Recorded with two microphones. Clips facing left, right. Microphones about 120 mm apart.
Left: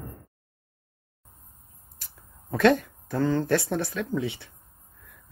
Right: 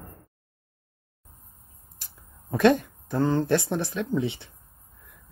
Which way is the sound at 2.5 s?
15° right (ahead or behind).